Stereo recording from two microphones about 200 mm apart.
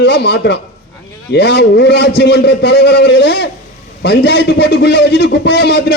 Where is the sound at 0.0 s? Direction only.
55° left (ahead or behind).